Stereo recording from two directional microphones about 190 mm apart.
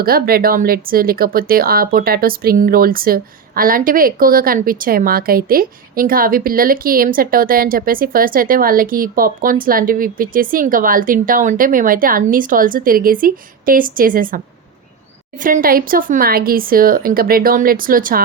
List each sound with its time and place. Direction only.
0.0 s speech: 50° right (ahead or behind)